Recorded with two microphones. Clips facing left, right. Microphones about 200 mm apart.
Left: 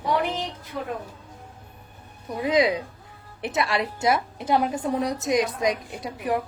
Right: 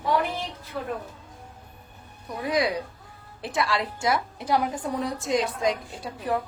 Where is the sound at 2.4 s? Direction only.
20° left (ahead or behind).